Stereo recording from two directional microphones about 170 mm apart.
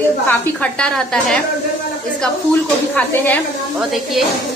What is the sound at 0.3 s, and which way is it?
A woman's voice, 5° left (ahead or behind).